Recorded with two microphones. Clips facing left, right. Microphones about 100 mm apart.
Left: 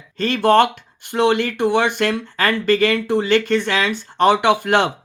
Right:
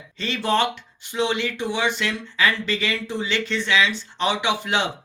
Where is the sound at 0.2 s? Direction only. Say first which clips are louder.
Left 8 dB; 50° left (ahead or behind).